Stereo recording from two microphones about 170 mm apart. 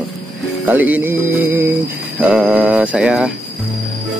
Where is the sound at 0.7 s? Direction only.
10° right (ahead or behind).